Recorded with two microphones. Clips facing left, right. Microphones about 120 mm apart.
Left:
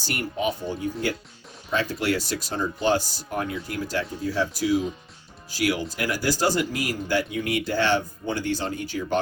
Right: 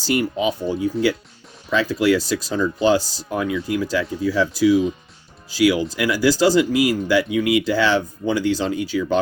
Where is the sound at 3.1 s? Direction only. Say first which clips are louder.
Right 6 dB; 90° right.